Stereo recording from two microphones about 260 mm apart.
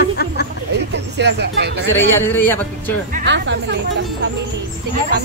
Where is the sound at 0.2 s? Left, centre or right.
Left.